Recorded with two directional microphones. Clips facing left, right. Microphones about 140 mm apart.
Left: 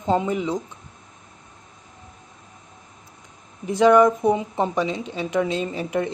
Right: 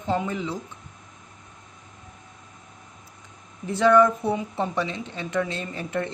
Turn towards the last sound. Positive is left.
turn(degrees=15)  # may be behind; listen again after turning